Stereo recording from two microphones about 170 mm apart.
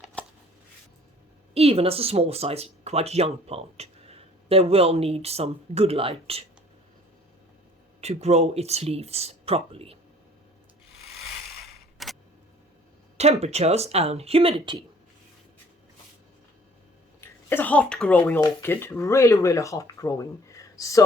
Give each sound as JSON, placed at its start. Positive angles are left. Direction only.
{"t": 1.5, "sound": "speech", "side_deg": -35}
{"t": 8.0, "sound": "speech", "side_deg": -40}
{"t": 11.6, "sound": "camera", "side_deg": 0}
{"t": 13.1, "sound": "speech", "side_deg": -40}
{"t": 17.2, "sound": "speech", "side_deg": 10}